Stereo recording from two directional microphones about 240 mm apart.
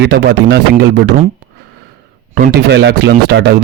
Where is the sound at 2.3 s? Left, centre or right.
Right.